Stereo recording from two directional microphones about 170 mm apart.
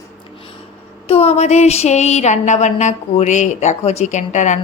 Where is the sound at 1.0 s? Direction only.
35° left (ahead or behind).